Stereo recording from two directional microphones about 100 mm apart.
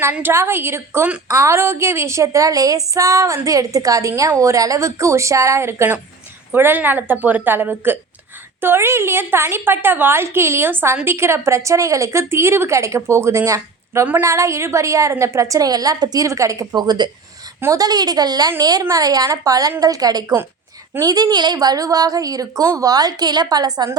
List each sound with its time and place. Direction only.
0.1 s a woman's voice: 20° right (ahead or behind); by 24.0 s 40° right (ahead or behind)